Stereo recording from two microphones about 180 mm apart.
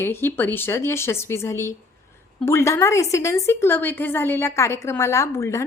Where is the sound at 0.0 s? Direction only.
10° left (ahead or behind).